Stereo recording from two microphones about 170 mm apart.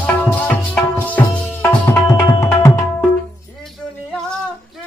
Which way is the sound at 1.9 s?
15° left (ahead or behind).